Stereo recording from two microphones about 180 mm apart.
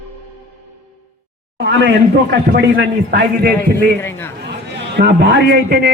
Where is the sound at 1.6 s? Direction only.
75° right (ahead or behind).